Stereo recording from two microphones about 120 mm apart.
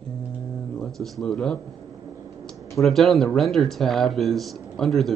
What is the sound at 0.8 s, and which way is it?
Speech, 5° left (ahead or behind).